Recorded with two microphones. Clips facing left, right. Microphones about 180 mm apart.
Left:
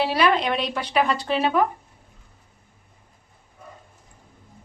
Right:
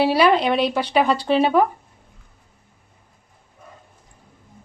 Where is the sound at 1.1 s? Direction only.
30° right (ahead or behind).